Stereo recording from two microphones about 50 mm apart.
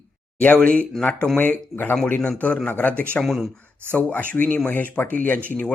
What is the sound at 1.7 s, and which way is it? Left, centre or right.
Speech, left.